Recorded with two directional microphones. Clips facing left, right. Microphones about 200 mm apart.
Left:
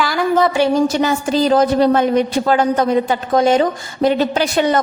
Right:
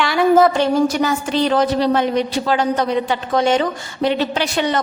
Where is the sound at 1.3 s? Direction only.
40° left (ahead or behind).